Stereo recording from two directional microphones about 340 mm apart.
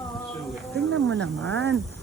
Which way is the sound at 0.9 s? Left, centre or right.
Right.